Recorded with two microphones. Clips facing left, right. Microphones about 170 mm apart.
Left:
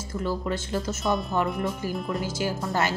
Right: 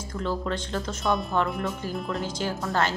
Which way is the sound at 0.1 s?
10° left (ahead or behind).